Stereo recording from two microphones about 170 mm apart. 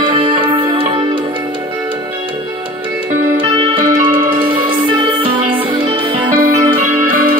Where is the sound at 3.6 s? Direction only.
30° right (ahead or behind).